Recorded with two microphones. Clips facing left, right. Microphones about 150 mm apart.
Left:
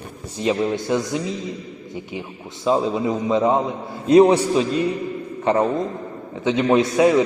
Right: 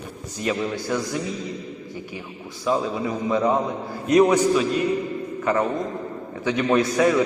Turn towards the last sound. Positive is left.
turn(degrees=20)  # may be behind; listen again after turning